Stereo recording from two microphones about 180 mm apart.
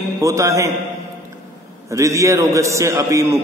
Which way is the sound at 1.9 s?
15° right (ahead or behind).